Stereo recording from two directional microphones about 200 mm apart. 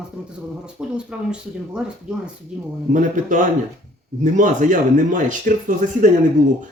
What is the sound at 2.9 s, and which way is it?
Speech, 40° right (ahead or behind).